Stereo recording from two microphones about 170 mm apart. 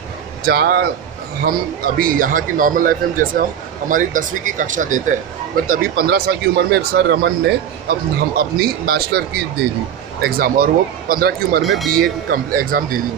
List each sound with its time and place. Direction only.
0.5 s speech: 65° right (ahead or behind)
2.0 s speech: 55° right (ahead or behind)
5.7 s speech: 60° right (ahead or behind); by 7.5 s 80° right
8.4 s speech: 65° right (ahead or behind)
10.2 s speech: 60° right (ahead or behind)
11.6 s speech: centre (ahead or behind)
12.0 s speech: 60° right (ahead or behind)